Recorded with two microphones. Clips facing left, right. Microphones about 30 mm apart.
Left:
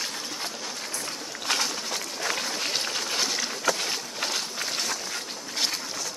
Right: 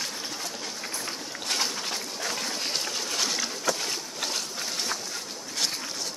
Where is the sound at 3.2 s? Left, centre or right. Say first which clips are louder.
Even; centre.